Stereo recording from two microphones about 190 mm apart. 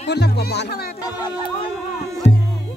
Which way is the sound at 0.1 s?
60° left (ahead or behind).